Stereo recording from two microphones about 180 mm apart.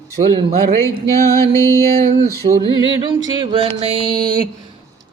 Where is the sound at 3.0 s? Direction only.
25° right (ahead or behind).